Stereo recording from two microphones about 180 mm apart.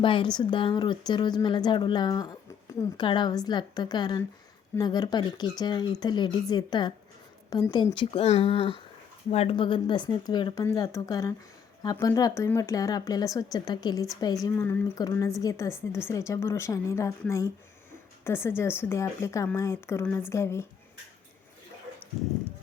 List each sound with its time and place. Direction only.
0.0 s a woman's voice: 30° left (ahead or behind)